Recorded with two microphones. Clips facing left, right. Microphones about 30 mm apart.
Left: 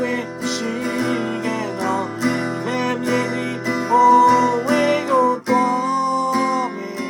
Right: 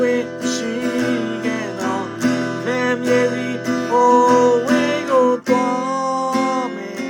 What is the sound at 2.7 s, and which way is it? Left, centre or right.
Music, centre.